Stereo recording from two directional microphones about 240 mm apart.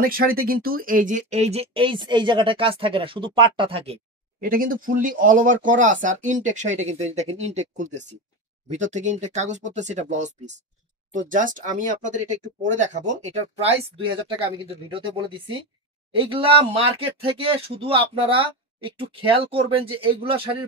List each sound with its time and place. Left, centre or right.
0.0 s speech: right
4.4 s speech: right